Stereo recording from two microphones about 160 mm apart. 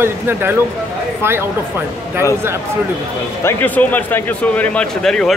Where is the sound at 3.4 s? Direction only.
10° left (ahead or behind).